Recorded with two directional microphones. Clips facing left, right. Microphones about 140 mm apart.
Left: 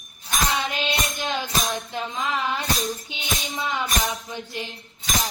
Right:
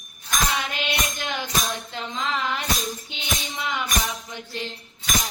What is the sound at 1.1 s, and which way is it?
Music, 15° left (ahead or behind).